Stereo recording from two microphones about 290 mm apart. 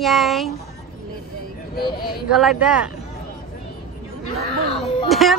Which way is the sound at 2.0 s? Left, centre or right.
Left.